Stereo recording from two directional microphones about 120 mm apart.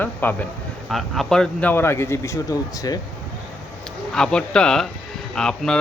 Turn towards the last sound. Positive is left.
turn(degrees=5)  # may be behind; listen again after turning